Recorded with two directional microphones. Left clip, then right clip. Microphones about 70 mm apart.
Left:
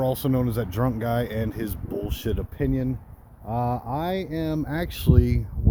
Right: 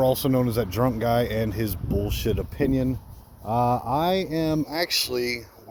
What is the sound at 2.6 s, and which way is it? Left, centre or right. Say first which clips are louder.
Speech: right 3 dB; centre.